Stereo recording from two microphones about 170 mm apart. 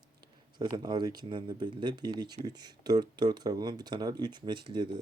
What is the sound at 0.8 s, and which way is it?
Speech, 25° right (ahead or behind).